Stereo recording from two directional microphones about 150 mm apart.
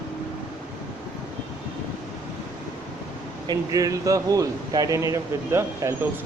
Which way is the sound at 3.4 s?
25° right (ahead or behind).